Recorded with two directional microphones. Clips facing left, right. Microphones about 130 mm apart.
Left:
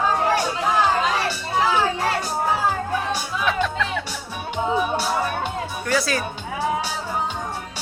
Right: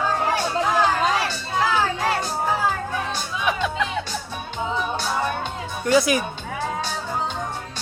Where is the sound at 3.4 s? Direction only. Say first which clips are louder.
Even; 15° right (ahead or behind).